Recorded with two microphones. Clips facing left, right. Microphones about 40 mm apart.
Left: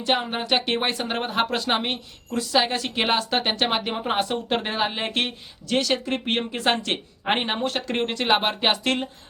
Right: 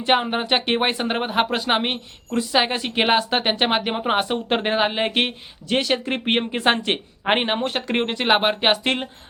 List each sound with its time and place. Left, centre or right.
0.0 s speech: right